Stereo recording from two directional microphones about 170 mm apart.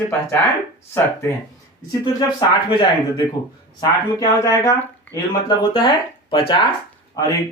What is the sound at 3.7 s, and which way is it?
Speech, 20° left (ahead or behind).